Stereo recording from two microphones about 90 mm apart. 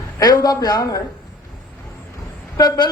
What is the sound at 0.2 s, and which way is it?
Speech, 45° left (ahead or behind).